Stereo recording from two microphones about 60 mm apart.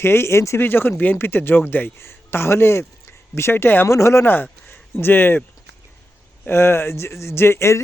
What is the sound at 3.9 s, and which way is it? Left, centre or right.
Speech, left.